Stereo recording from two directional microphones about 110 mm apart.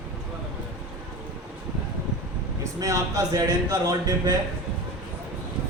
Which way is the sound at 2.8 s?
30° right (ahead or behind).